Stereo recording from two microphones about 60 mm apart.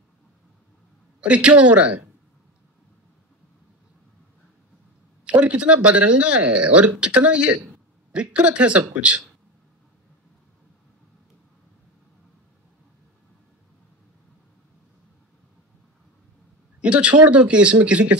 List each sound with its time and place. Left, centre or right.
1.2 s speech: right
5.2 s speech: right
16.8 s speech: right